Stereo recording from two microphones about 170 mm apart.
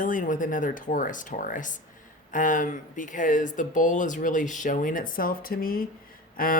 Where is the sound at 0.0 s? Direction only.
50° left (ahead or behind).